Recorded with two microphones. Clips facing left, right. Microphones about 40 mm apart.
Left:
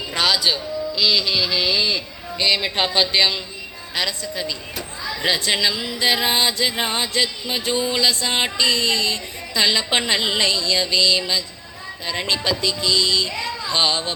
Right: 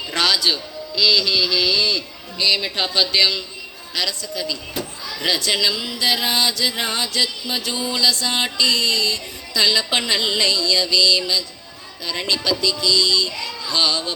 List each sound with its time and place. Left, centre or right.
0.1 s a man's voice: centre; by 2.9 s left
2.9 s music: left
12.0 s speech: left